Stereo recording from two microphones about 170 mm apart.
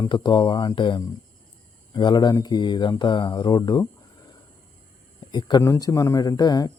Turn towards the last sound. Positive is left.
turn(degrees=25)  # may be behind; listen again after turning